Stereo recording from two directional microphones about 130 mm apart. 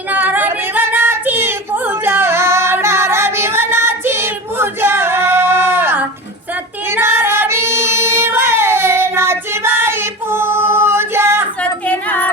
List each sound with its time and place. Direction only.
0.1 s female singing: 15° right (ahead or behind)
6.9 s child singing: 20° right (ahead or behind)
11.6 s a sound: 10° left (ahead or behind)